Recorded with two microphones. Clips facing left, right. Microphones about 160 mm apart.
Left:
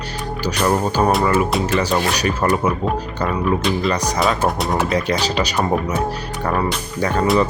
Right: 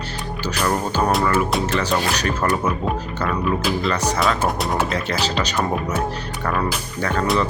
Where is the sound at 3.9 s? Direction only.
10° left (ahead or behind).